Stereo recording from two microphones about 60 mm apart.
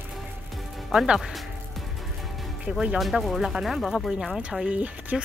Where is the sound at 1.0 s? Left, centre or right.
Centre.